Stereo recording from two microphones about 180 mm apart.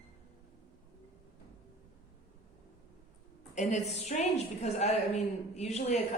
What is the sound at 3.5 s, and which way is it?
A woman's voice, 40° left (ahead or behind).